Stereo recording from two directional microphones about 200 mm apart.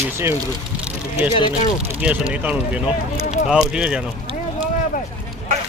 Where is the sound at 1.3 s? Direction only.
25° left (ahead or behind).